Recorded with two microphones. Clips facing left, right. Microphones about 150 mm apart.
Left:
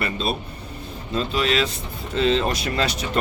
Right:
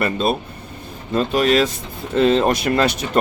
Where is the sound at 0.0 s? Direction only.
45° right (ahead or behind).